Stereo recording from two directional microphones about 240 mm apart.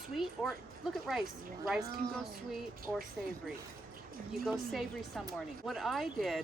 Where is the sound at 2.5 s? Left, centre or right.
Centre.